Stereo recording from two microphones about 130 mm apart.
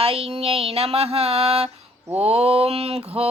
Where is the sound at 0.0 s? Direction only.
45° right (ahead or behind).